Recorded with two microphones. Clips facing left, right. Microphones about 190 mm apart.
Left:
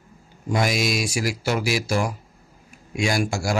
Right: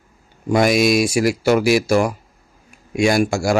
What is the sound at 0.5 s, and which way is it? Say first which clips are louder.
Speech: right 8 dB; 60° right (ahead or behind).